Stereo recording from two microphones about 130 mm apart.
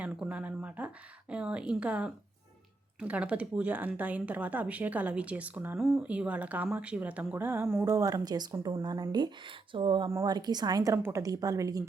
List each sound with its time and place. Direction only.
0.0 s a woman's voice: 10° right (ahead or behind); by 8.5 s 30° right (ahead or behind)
8.5 s a woman's voice: 20° right (ahead or behind)
8.8 s a woman's voice: 35° right (ahead or behind)